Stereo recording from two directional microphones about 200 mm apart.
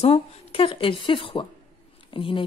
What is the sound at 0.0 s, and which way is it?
Speech, 30° left (ahead or behind).